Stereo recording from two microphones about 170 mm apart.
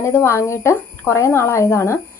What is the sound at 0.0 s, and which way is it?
A woman's voice, 15° left (ahead or behind).